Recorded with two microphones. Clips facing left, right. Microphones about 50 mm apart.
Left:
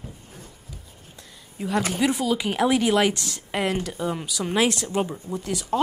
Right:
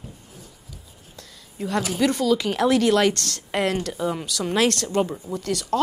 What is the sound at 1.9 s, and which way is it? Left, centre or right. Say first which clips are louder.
A woman's voice: right 6 dB; centre.